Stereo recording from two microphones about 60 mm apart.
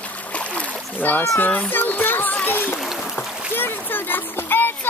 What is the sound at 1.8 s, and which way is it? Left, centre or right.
Music, left.